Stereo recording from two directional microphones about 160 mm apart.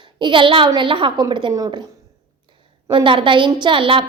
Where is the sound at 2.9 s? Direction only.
30° right (ahead or behind).